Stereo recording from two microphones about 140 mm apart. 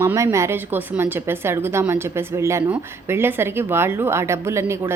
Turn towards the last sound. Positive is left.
turn(degrees=-20)  # may be behind; listen again after turning